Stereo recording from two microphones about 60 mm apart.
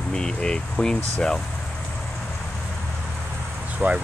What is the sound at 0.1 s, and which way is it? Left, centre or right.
Speech, centre.